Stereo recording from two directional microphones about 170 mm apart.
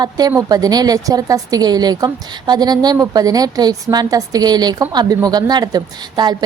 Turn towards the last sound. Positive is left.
turn(degrees=-25)  # may be behind; listen again after turning